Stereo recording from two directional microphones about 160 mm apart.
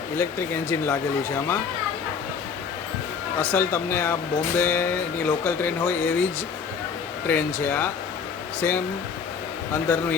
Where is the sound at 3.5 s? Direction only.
15° left (ahead or behind).